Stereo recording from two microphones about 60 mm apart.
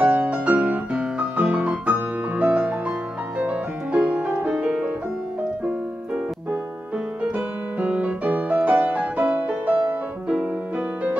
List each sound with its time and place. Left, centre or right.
0.0 s music: right
7.3 s music: right